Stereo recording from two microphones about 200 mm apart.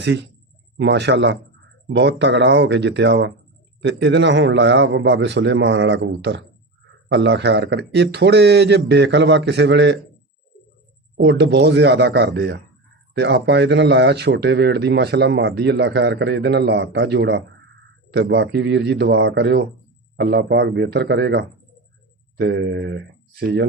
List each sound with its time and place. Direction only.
0.0 s speech: 60° right (ahead or behind)
11.2 s speech: 60° right (ahead or behind)